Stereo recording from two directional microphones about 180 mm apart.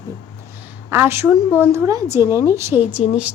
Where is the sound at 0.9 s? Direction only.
15° right (ahead or behind).